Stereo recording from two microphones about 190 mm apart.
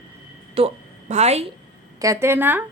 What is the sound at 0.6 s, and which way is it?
Speech, 30° right (ahead or behind).